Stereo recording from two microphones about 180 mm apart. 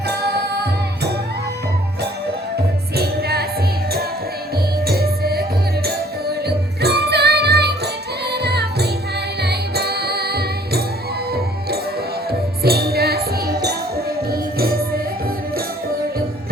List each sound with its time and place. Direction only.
0.3 s music: 65° right (ahead or behind)
2.9 s music: 60° right (ahead or behind)
4.5 s music: 60° right (ahead or behind)